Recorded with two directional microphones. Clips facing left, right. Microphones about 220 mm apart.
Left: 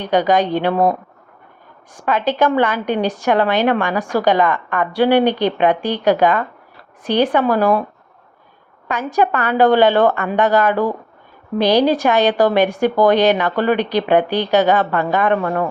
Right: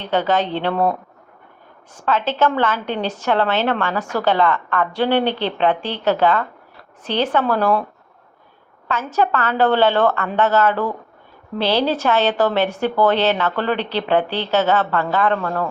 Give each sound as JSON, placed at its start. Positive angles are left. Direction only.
{"t": 0.0, "sound": "a woman's voice", "side_deg": 15}
{"t": 8.9, "sound": "a woman's voice", "side_deg": 15}